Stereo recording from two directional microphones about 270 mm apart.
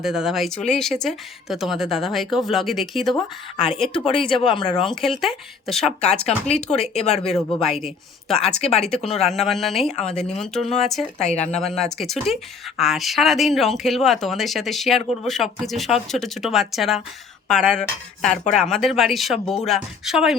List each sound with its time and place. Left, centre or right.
0.0 s speech: centre
3.9 s speech: centre
4.9 s speech: centre
6.8 s speech: left
7.3 s speech: centre
8.6 s speech: left
9.2 s speech: centre
11.3 s speech: left
11.6 s speech: centre